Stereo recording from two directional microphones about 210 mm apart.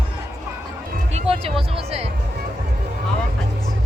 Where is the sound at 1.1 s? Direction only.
25° right (ahead or behind).